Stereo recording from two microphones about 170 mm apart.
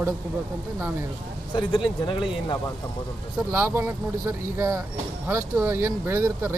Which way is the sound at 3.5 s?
15° right (ahead or behind).